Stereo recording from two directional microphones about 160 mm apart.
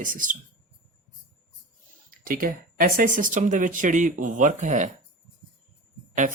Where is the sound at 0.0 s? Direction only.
55° right (ahead or behind).